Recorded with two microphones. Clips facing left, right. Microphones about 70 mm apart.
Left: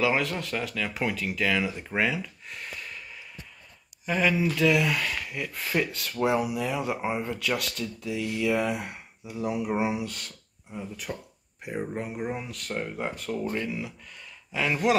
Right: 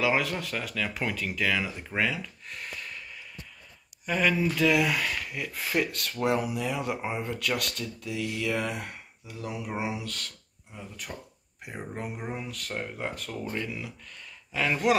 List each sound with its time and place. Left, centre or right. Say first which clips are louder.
0.0 s speech: left 1 dB; centre
11.6 s speech: left 5 dB; centre